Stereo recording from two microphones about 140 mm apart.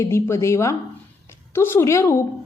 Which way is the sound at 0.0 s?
20° left (ahead or behind).